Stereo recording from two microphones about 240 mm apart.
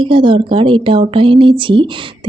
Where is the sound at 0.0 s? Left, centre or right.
Right.